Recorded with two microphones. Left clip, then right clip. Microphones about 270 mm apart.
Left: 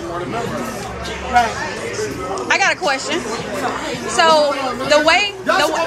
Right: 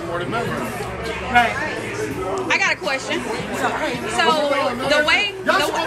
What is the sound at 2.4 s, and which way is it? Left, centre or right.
A woman's voice, centre.